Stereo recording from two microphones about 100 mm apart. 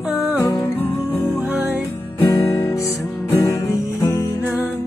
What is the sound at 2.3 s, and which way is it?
Music, 30° left (ahead or behind).